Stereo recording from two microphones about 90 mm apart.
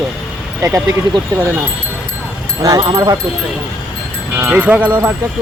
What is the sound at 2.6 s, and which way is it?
Speech, 40° right (ahead or behind).